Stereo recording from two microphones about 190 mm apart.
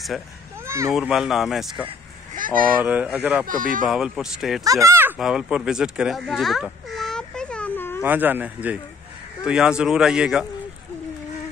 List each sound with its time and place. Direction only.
0.7 s speech: 15° right (ahead or behind)
0.9 s speech: centre (ahead or behind)
2.3 s speech: 45° right (ahead or behind)
2.8 s speech: 10° right (ahead or behind)
3.4 s speech: 45° right (ahead or behind)
3.9 s speech: 5° right (ahead or behind)
4.6 s speech: 15° right (ahead or behind); by 8.0 s 10° left (ahead or behind)
8.0 s speech: 10° right (ahead or behind)